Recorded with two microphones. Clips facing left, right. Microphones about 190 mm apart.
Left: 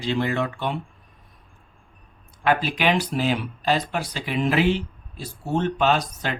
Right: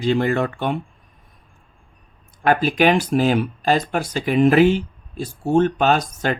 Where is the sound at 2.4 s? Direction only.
50° right (ahead or behind).